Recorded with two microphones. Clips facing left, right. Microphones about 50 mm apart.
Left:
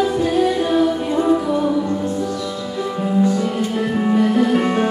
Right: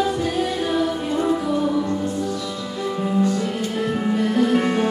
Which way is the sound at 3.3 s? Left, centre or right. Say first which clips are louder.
Left 4 dB; centre.